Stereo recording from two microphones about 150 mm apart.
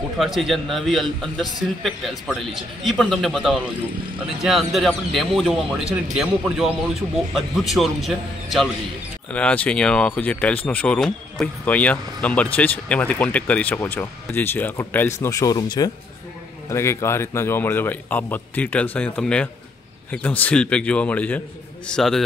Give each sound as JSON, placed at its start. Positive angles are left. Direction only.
{"t": 0.2, "sound": "a man's voice", "side_deg": 0}
{"t": 9.3, "sound": "a man's voice", "side_deg": 10}